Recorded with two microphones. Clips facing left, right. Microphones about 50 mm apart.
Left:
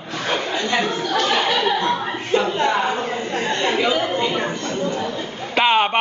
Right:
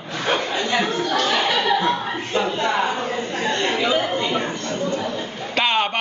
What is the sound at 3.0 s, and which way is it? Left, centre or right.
Speech, left.